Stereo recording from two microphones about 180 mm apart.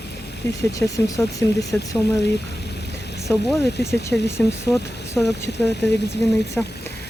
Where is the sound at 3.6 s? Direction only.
65° left (ahead or behind).